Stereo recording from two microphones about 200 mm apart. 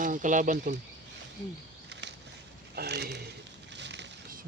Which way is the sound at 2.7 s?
55° right (ahead or behind).